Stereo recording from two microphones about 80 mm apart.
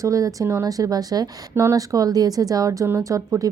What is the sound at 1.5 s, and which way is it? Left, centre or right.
Speech, right.